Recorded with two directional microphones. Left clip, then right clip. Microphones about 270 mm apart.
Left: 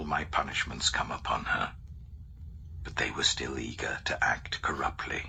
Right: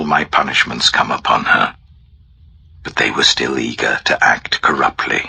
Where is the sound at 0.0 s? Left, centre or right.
Right.